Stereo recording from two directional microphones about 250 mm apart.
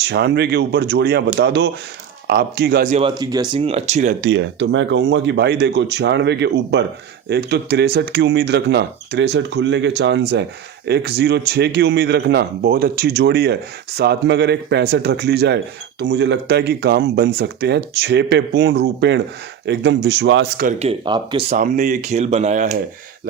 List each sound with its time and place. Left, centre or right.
0.0 s a man's voice: right
3.2 s speech: centre
4.3 s a man's voice: right
20.6 s speech: right
21.6 s speech: right